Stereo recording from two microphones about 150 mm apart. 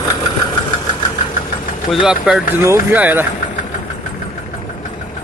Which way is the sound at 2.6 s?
15° right (ahead or behind).